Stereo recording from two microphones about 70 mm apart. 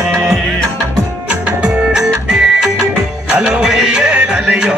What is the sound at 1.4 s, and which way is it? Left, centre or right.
Music, centre.